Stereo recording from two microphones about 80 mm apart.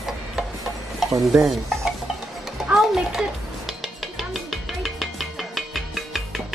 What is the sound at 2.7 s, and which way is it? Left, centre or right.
Music, centre.